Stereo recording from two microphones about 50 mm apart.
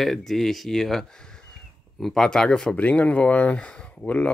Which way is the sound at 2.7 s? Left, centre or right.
Left.